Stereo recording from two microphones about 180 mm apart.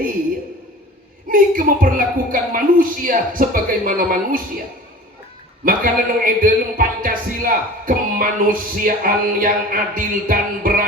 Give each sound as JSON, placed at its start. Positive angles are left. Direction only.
{"t": 1.3, "sound": "a man's voice", "side_deg": -50}
{"t": 5.6, "sound": "a man's voice", "side_deg": -50}